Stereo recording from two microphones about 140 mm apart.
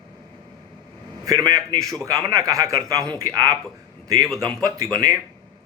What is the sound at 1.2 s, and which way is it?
Speech, 25° right (ahead or behind).